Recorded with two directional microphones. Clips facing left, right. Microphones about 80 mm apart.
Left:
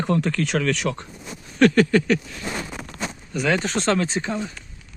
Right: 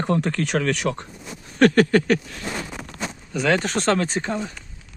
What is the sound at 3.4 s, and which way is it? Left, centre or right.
Speech, right.